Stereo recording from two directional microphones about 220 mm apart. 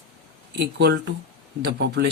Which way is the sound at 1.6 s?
50° right (ahead or behind).